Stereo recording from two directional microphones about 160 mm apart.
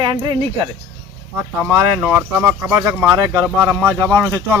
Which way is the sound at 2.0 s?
10° right (ahead or behind).